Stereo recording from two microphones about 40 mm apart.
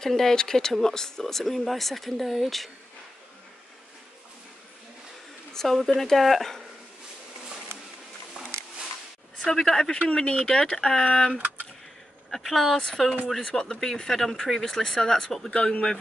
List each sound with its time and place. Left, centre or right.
0.0 s speech: centre
5.5 s speech: centre
9.5 s speech: centre
13.4 s speech: left
13.7 s speech: centre